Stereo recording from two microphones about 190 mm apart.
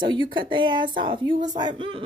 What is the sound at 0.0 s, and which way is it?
A woman's voice, 25° right (ahead or behind).